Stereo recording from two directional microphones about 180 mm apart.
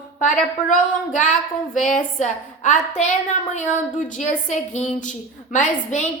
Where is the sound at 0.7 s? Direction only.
45° left (ahead or behind).